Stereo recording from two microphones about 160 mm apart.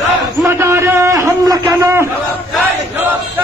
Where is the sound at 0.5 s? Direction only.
15° right (ahead or behind).